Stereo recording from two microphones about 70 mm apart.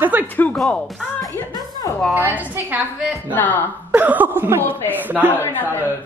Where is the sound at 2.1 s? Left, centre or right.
Right.